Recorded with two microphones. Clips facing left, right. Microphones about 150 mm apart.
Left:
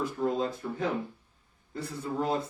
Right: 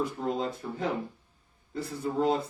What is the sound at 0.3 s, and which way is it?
A man's voice, 25° right (ahead or behind).